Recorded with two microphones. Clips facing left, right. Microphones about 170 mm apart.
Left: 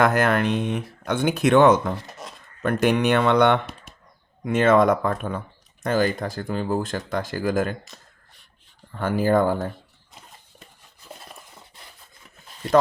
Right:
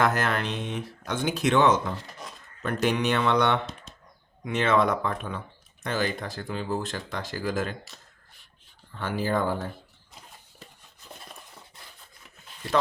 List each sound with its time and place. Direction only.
0.0 s speech: 55° left (ahead or behind)
4.4 s speech: 45° left (ahead or behind)
8.9 s speech: 50° left (ahead or behind)